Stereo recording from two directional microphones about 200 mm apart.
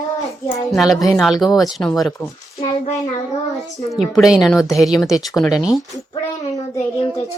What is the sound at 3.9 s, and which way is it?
Speech, centre (ahead or behind).